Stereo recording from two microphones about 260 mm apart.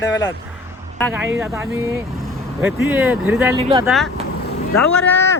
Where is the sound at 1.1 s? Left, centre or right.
Centre.